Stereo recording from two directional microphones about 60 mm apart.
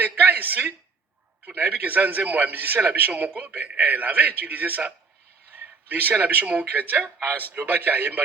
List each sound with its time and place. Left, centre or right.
0.2 s a man's voice: right
1.5 s a man's voice: right